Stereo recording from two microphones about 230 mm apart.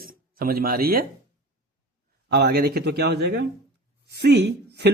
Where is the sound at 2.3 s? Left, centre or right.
Right.